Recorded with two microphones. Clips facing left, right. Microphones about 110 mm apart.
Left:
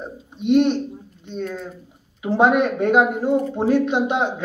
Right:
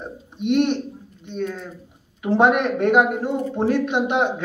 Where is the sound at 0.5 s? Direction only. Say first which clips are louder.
Left 3 dB; 10° left (ahead or behind).